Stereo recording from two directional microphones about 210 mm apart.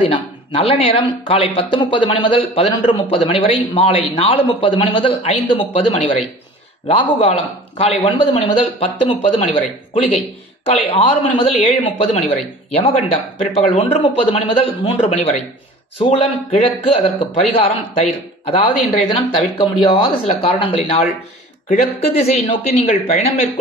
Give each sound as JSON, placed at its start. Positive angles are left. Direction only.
{"t": 0.1, "sound": "speech", "side_deg": 30}
{"t": 22.2, "sound": "speech", "side_deg": 30}